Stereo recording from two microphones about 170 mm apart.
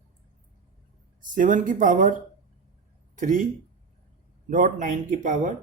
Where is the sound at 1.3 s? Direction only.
50° right (ahead or behind).